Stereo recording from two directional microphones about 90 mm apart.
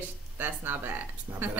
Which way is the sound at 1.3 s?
35° right (ahead or behind).